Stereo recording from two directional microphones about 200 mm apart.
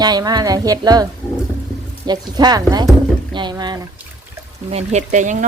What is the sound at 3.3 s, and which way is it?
Rowboat, 20° right (ahead or behind).